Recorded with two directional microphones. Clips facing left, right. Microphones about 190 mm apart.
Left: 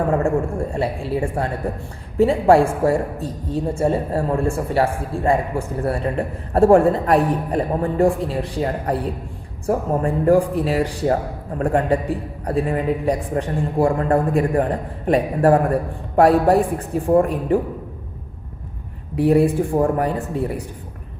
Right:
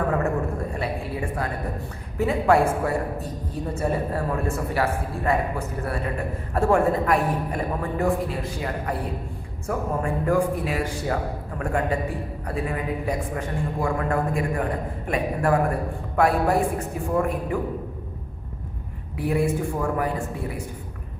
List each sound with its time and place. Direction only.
0.2 s a woman's voice: 30° left (ahead or behind)
19.1 s a woman's voice: 35° left (ahead or behind)